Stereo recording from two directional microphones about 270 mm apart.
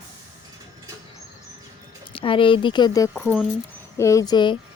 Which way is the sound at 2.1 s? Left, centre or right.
Centre.